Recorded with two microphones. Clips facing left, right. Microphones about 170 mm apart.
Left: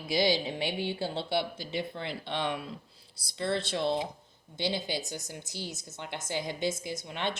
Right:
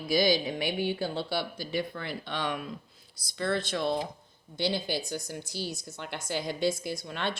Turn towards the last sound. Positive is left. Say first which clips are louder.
# right 1 dB
turn(degrees=20)  # may be behind; listen again after turning